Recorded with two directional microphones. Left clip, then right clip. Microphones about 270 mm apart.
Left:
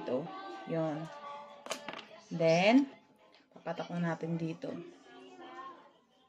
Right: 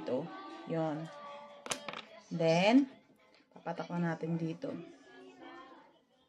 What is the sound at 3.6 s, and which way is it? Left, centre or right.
Speech, centre.